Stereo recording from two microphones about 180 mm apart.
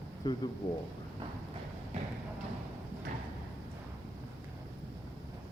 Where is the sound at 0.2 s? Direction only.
25° left (ahead or behind).